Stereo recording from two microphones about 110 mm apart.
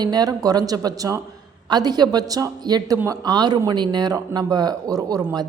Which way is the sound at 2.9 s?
20° right (ahead or behind).